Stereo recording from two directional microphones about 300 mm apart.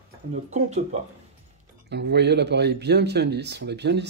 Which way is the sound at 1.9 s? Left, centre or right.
Right.